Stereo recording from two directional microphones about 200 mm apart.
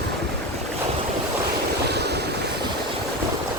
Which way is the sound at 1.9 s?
55° right (ahead or behind).